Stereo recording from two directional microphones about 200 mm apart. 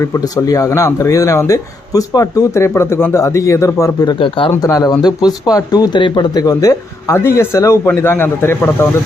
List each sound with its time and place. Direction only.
0.0 s speech: 15° left (ahead or behind)